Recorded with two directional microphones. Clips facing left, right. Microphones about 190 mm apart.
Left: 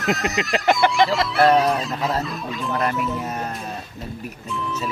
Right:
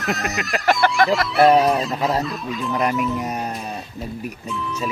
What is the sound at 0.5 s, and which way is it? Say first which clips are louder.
Speech: even; 20° left (ahead or behind).